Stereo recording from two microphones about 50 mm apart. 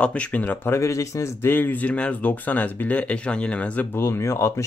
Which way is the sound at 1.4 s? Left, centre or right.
Left.